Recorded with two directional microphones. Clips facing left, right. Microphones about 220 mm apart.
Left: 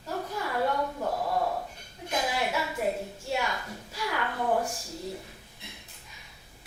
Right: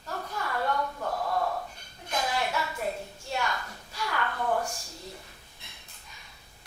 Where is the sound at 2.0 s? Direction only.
5° left (ahead or behind).